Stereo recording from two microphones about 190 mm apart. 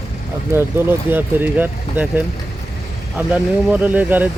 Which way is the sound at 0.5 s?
10° right (ahead or behind).